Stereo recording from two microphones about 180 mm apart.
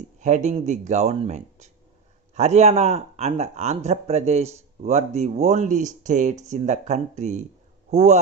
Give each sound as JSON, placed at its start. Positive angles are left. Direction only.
{"t": 0.2, "sound": "a man's voice", "side_deg": -40}